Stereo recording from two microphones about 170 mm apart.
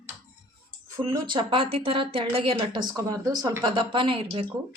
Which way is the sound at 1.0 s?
20° right (ahead or behind).